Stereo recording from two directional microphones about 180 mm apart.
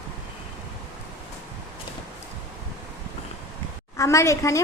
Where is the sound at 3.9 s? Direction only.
15° left (ahead or behind).